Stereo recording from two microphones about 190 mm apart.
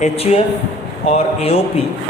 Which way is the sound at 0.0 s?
30° left (ahead or behind).